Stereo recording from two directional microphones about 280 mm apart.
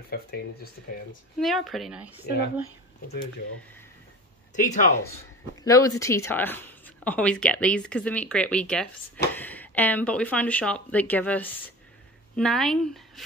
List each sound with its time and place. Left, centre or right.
0.1 s speech: left
1.4 s a woman's voice: centre
2.2 s speech: left
4.6 s speech: left
5.6 s a woman's voice: centre